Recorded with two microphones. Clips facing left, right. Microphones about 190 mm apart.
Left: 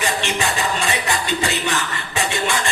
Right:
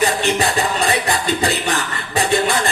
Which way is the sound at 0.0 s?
35° right (ahead or behind).